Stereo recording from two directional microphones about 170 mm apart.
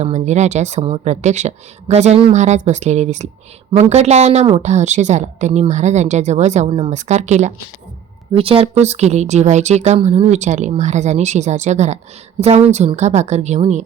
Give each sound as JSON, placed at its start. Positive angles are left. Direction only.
{"t": 0.0, "sound": "a woman's voice", "side_deg": -40}